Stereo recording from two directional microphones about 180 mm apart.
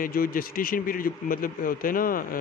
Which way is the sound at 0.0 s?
50° left (ahead or behind).